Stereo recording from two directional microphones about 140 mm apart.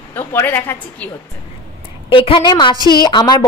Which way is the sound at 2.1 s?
40° left (ahead or behind).